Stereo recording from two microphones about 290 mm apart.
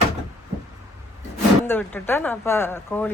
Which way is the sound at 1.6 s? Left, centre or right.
Centre.